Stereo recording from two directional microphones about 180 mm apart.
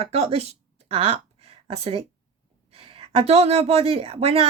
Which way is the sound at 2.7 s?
30° right (ahead or behind).